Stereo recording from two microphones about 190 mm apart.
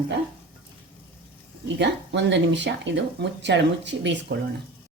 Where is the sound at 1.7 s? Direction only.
65° right (ahead or behind).